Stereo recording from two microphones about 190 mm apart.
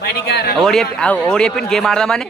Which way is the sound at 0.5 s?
Centre (ahead or behind).